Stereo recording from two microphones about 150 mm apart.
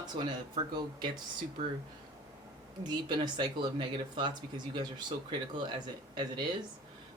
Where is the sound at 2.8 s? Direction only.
30° right (ahead or behind).